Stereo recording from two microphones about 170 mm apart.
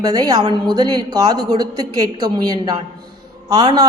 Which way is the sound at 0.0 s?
20° right (ahead or behind).